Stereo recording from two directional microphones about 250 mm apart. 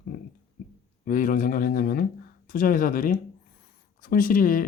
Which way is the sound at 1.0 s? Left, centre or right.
Left.